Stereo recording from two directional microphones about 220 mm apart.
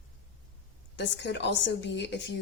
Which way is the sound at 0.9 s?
55° left (ahead or behind).